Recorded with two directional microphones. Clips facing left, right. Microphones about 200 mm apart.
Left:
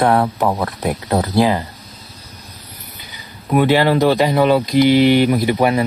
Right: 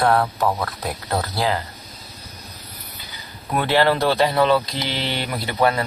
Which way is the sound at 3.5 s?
15° left (ahead or behind).